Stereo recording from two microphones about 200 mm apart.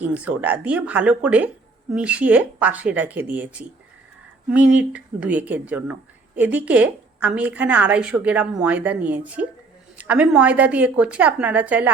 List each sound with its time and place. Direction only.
0.0 s speech: 10° right (ahead or behind)